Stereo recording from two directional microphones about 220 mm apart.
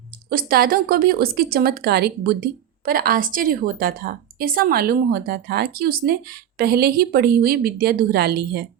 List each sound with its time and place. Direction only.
0.3 s speech: 45° right (ahead or behind)